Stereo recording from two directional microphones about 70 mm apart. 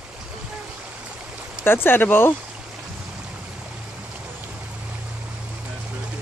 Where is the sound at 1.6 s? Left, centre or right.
Left.